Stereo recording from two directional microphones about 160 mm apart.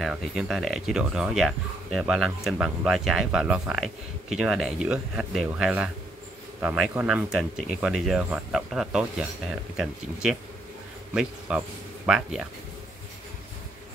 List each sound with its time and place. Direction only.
0.0 s speech: centre (ahead or behind)
11.1 s a man's voice: 5° right (ahead or behind)